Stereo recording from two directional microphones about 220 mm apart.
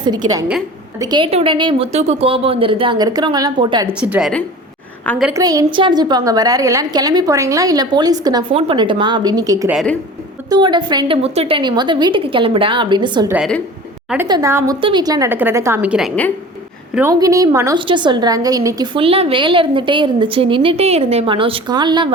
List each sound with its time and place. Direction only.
0.3 s a woman's voice: 15° right (ahead or behind)
3.8 s a woman's voice: 5° right (ahead or behind)
9.7 s a woman's voice: 5° left (ahead or behind)
10.5 s a woman's voice: 20° right (ahead or behind)
13.3 s a woman's voice: centre (ahead or behind)
14.3 s a woman's voice: 15° right (ahead or behind); by 16.3 s 5° left (ahead or behind)
16.9 s a woman's voice: 10° right (ahead or behind)